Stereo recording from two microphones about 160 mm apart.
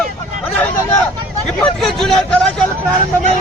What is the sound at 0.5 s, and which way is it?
Vehicle, 10° left (ahead or behind).